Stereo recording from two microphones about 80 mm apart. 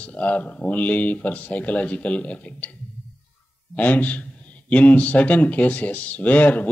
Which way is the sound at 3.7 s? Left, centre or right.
Left.